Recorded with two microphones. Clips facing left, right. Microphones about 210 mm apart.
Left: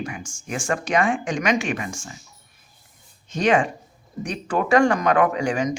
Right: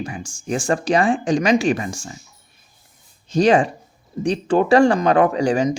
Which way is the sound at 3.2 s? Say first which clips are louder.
Right 5 dB; 35° right (ahead or behind).